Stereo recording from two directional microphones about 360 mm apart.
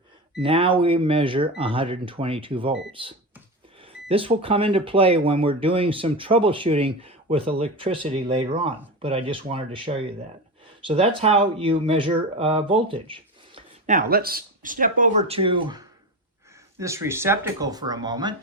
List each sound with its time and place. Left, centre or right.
0.4 s speech: centre